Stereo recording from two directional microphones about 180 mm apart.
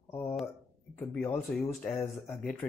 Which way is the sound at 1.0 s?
10° left (ahead or behind).